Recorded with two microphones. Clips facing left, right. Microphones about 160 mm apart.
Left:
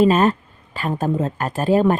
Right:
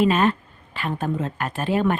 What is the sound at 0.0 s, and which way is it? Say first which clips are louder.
Speech: left 4 dB; 40° left (ahead or behind).